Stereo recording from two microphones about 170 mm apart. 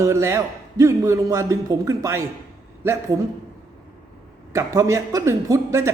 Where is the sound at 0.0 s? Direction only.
15° right (ahead or behind).